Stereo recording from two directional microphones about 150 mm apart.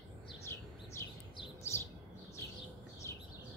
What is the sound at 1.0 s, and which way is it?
Bird, 15° left (ahead or behind).